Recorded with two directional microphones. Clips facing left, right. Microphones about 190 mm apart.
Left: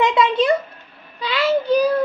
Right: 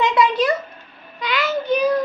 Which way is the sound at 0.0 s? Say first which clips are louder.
Left 1 dB; 25° left (ahead or behind).